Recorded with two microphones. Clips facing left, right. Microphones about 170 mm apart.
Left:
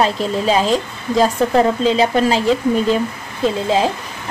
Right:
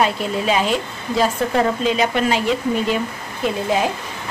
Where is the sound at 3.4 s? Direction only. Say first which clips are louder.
Left 3 dB; 25° left (ahead or behind).